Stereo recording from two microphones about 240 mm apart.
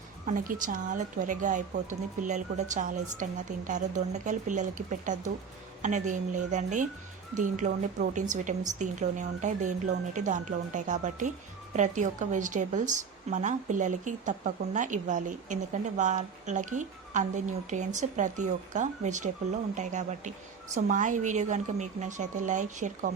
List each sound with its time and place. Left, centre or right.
0.3 s a woman's voice: right